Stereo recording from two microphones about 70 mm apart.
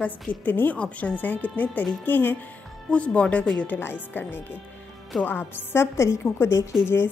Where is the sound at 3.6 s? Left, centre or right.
Left.